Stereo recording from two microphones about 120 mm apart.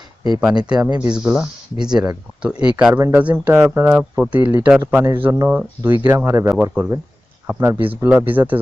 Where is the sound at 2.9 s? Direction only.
20° right (ahead or behind).